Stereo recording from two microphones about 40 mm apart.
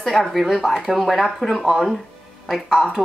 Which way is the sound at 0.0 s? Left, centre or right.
Centre.